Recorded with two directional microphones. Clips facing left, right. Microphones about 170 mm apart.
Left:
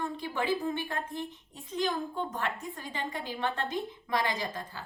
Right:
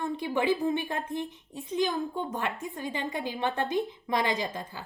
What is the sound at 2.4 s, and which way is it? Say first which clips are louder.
Speech: right 2 dB; 15° right (ahead or behind).